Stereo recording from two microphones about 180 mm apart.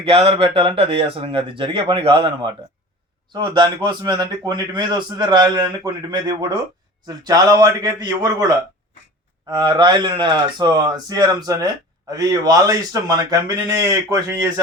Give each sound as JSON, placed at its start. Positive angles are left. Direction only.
{"t": 0.0, "sound": "a man's voice", "side_deg": -30}